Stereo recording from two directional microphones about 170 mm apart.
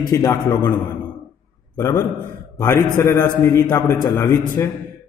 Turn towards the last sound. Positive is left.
turn(degrees=15)  # may be behind; listen again after turning